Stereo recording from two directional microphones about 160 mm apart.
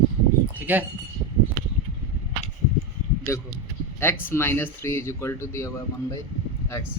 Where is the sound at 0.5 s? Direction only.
10° right (ahead or behind).